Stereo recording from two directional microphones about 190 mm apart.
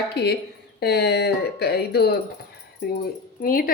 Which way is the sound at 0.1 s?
60° left (ahead or behind).